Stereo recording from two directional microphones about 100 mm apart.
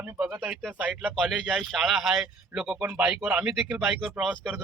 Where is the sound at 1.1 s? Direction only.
Centre (ahead or behind); by 3.4 s 20° right (ahead or behind).